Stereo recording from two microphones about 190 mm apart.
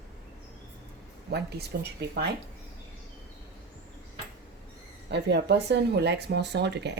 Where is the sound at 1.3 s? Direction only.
60° right (ahead or behind).